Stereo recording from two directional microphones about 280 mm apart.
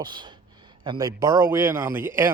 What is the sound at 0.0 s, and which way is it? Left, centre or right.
Speech, centre.